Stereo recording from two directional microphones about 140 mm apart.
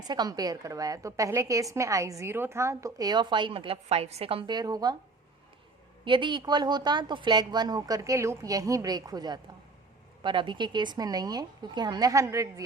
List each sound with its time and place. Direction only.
0.1 s a woman's voice: 30° right (ahead or behind)
4.5 s a woman's voice: 30° right (ahead or behind)
6.1 s a woman's voice: 35° right (ahead or behind)